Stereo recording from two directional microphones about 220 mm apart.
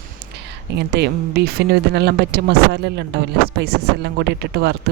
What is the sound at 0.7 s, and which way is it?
Speech, 50° right (ahead or behind).